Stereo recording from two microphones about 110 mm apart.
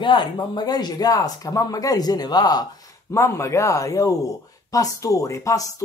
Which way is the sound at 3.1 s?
25° left (ahead or behind).